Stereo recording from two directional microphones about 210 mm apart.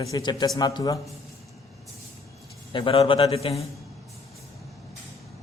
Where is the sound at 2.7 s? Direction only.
25° left (ahead or behind).